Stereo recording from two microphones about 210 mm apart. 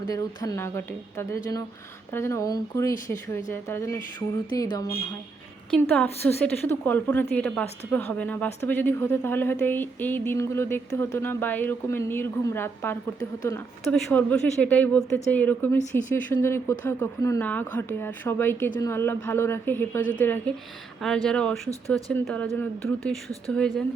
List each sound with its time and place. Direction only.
0.1 s a woman's voice: 15° left (ahead or behind)
5.7 s a woman's voice: 5° left (ahead or behind)